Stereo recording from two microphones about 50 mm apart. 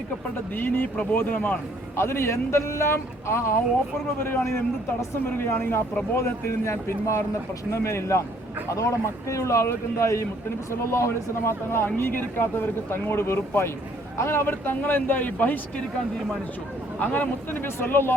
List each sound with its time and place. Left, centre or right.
0.5 s speech: left
2.0 s speech: left
5.2 s speech: left
6.1 s a man's voice: left
8.7 s speech: left
10.7 s speech: left
11.9 s speech: left
14.4 s speech: left
17.0 s speech: left